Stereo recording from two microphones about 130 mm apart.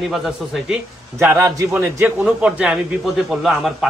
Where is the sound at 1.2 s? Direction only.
20° right (ahead or behind).